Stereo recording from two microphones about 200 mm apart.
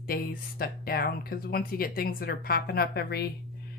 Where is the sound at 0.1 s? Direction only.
45° left (ahead or behind).